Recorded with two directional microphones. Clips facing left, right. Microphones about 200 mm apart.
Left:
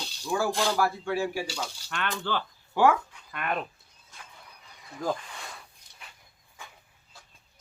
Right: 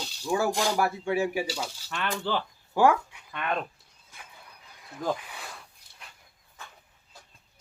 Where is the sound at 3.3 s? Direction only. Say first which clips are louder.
Right 1 dB; 5° left (ahead or behind).